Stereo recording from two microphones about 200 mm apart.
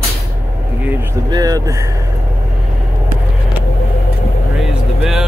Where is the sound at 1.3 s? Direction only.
20° right (ahead or behind).